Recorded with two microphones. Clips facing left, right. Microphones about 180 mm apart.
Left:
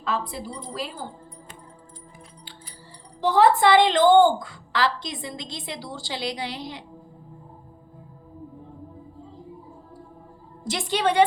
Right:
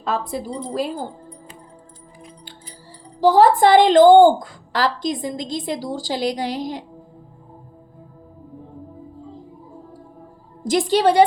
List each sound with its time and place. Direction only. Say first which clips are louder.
0.0 s a woman's voice: right 4 dB; 45° right (ahead or behind)
3.2 s a woman's voice: right 5 dB; 40° right (ahead or behind)
10.6 s a woman's voice: right 8 dB; 40° right (ahead or behind)